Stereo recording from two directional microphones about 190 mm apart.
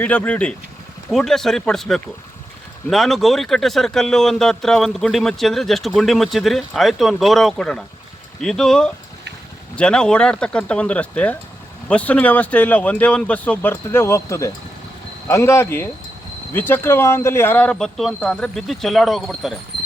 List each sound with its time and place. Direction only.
0.0 s speech: 5° left (ahead or behind)